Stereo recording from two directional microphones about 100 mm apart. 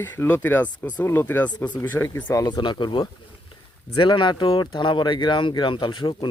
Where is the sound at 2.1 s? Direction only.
35° left (ahead or behind).